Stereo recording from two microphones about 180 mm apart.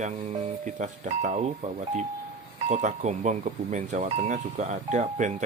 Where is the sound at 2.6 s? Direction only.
40° right (ahead or behind).